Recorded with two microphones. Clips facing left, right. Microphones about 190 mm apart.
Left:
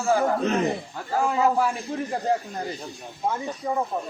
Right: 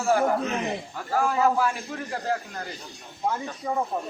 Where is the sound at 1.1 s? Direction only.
20° left (ahead or behind).